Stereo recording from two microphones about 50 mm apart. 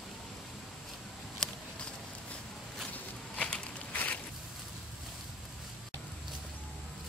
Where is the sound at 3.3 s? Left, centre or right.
Left.